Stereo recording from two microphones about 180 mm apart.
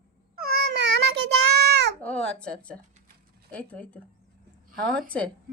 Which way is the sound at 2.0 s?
5° left (ahead or behind).